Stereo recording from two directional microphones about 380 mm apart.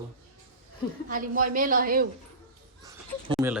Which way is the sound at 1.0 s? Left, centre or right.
Right.